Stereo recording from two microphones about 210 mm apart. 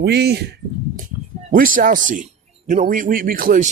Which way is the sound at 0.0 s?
50° right (ahead or behind).